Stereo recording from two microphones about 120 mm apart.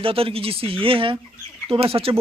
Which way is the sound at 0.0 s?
50° right (ahead or behind).